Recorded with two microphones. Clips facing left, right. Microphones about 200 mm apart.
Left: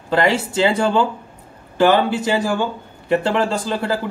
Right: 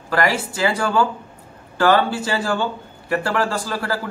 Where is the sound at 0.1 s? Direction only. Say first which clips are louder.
Left 3 dB; 25° left (ahead or behind).